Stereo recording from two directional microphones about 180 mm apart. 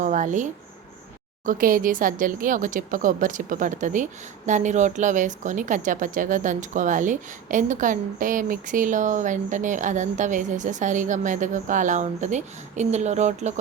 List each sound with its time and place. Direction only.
0.0 s speech: 45° right (ahead or behind)
1.5 s speech: 50° right (ahead or behind)